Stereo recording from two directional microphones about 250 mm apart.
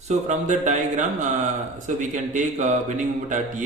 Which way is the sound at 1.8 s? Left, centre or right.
Right.